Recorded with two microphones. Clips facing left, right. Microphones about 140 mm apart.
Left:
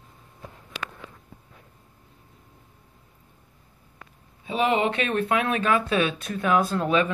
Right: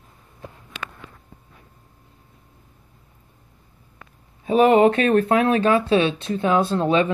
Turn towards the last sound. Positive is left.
turn(degrees=-30)  # may be behind; listen again after turning